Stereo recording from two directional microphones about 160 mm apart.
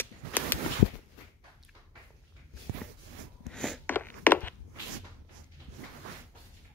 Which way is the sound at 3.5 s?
5° left (ahead or behind).